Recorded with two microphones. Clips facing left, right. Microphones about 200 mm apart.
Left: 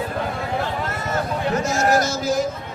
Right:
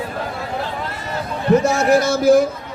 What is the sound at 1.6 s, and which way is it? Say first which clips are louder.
Speech: right 4 dB; 60° right (ahead or behind).